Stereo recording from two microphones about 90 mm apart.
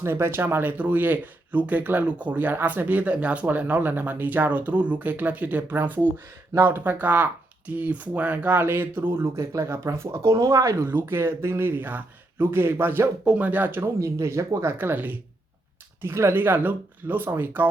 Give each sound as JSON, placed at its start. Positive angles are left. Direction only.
{"t": 0.0, "sound": "speech", "side_deg": -25}
{"t": 9.3, "sound": "speech", "side_deg": -35}
{"t": 10.8, "sound": "speech", "side_deg": -25}
{"t": 14.0, "sound": "speech", "side_deg": -30}